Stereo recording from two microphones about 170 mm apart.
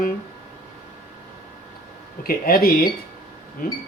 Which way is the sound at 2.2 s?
60° left (ahead or behind).